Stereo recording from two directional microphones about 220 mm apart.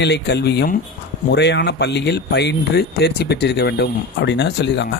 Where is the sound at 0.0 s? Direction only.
50° left (ahead or behind).